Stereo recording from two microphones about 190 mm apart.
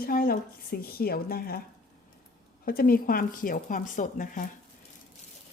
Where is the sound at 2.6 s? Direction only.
50° left (ahead or behind).